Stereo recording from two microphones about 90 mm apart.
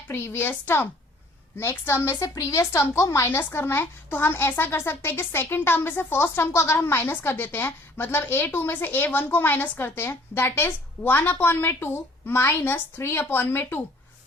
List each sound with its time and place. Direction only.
0.1 s speech: 25° left (ahead or behind)
2.1 s speech: 35° left (ahead or behind)